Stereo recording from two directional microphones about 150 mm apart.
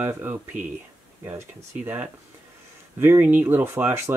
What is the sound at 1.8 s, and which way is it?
Speech, 15° right (ahead or behind).